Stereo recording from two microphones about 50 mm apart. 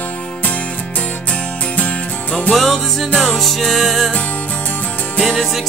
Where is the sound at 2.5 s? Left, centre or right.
Centre.